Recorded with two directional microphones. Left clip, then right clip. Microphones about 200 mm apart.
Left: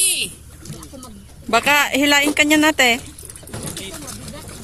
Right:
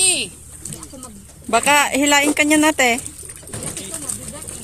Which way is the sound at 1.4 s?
Centre (ahead or behind).